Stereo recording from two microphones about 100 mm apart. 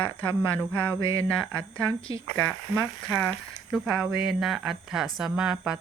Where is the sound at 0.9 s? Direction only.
30° right (ahead or behind).